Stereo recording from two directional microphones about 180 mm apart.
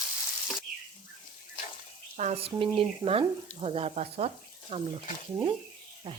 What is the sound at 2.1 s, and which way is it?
Speech, 40° right (ahead or behind).